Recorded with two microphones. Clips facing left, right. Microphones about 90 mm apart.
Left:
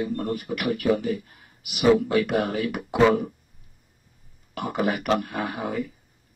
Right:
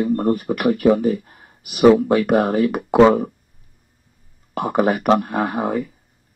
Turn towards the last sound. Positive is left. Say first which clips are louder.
# right 7 dB
turn(degrees=-45)  # may be behind; listen again after turning